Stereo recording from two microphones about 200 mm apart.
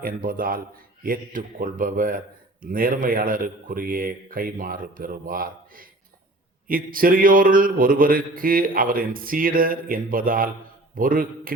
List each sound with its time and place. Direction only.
0.0 s a man's voice: 45° right (ahead or behind)